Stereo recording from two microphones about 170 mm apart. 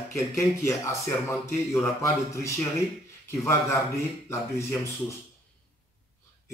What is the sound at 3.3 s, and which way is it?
A man's voice, 15° left (ahead or behind).